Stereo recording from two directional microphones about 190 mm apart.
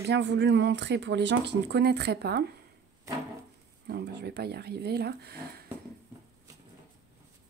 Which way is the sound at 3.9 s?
60° right (ahead or behind).